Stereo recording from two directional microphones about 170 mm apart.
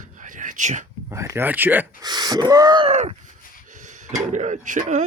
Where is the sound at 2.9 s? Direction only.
45° right (ahead or behind).